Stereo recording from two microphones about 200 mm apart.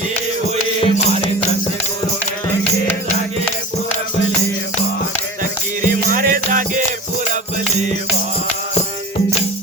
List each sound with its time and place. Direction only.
0.8 s music: 25° left (ahead or behind)
5.9 s music: 45° right (ahead or behind)